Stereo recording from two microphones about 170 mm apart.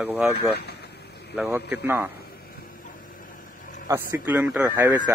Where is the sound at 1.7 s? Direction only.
10° right (ahead or behind).